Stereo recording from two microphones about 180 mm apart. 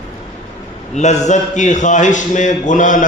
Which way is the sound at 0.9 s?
40° left (ahead or behind).